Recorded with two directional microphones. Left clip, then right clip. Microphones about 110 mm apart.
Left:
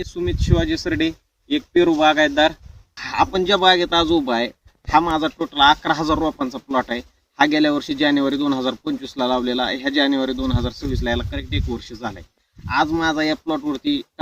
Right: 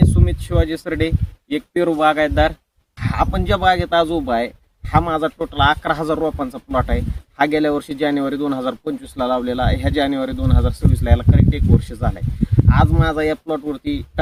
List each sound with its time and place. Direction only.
0.0 s speech: 20° right (ahead or behind)
12.6 s speech: 20° right (ahead or behind)